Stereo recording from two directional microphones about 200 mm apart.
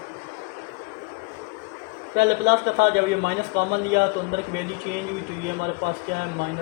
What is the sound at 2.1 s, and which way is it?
A man's voice, 55° right (ahead or behind).